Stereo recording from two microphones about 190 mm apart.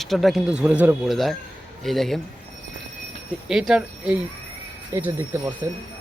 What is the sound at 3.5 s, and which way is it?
Speech, 5° right (ahead or behind).